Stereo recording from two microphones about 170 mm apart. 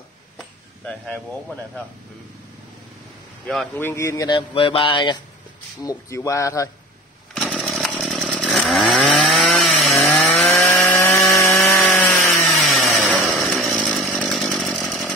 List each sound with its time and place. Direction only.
0.4 s speech: 5° left (ahead or behind)
3.4 s speech: centre (ahead or behind)
3.8 s speech: 15° left (ahead or behind)
7.3 s chainsaw: centre (ahead or behind)
11.0 s sawing: 10° left (ahead or behind)
11.6 s wood: 10° left (ahead or behind)
12.4 s chainsaw: 5° left (ahead or behind)